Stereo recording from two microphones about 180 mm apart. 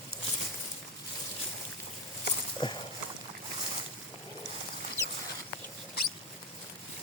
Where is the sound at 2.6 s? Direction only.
25° left (ahead or behind).